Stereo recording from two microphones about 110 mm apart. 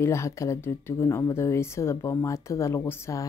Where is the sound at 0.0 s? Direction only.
25° left (ahead or behind).